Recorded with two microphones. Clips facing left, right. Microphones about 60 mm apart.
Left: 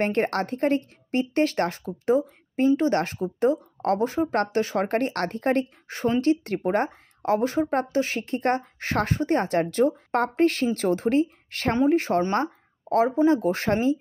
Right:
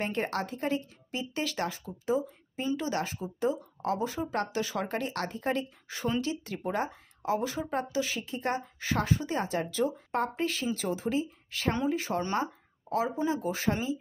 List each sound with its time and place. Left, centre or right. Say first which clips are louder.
0.0 s speech: left 8 dB; left